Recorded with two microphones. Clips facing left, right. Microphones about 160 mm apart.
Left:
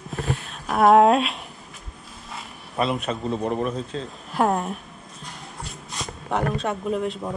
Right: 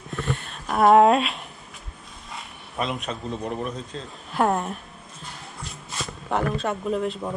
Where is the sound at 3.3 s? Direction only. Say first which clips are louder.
Left 5 dB; 35° left (ahead or behind).